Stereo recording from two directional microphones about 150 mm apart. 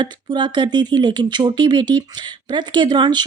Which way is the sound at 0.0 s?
30° right (ahead or behind).